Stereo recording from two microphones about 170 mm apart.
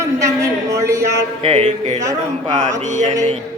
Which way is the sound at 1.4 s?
40° right (ahead or behind).